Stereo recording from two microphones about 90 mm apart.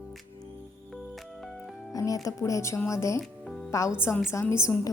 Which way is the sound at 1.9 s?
40° left (ahead or behind).